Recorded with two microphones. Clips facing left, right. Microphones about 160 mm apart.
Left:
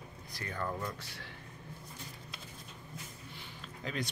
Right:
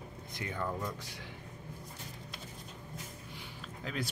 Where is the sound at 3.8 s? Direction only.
5° right (ahead or behind).